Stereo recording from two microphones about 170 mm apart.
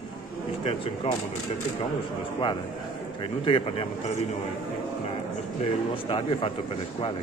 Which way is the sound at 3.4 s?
30° left (ahead or behind).